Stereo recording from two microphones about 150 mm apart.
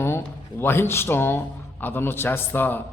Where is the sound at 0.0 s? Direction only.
15° left (ahead or behind).